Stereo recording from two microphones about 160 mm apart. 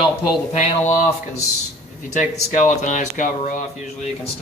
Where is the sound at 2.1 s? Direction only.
50° left (ahead or behind).